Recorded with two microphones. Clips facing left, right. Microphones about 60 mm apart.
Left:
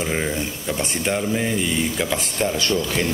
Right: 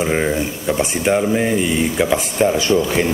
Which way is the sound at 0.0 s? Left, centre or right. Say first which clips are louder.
Right 6 dB; centre.